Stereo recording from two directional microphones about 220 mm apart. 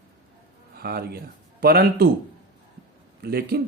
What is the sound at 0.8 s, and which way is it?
Speech, 45° right (ahead or behind).